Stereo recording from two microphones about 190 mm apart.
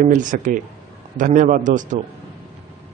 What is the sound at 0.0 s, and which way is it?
A man's voice, 45° right (ahead or behind).